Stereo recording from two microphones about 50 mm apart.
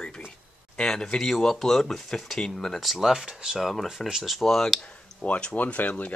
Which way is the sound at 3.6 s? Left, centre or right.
Centre.